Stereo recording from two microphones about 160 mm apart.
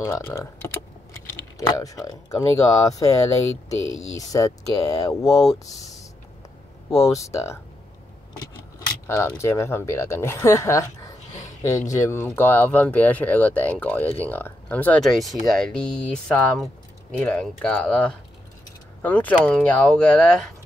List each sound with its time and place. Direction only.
0.0 s speech: 15° left (ahead or behind)
1.7 s speech: 25° left (ahead or behind)
6.9 s speech: 20° left (ahead or behind)
9.0 s speech: 15° left (ahead or behind)